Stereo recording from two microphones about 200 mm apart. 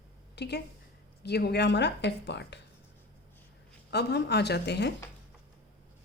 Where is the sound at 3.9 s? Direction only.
55° left (ahead or behind).